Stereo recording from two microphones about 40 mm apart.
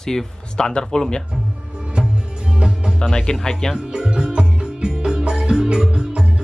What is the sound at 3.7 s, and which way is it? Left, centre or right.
Music, right.